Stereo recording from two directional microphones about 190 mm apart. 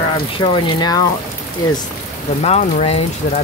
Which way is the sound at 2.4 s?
35° left (ahead or behind).